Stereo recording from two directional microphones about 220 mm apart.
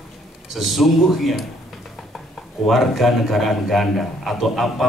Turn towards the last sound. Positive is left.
turn(degrees=0)  # may be behind; listen again after turning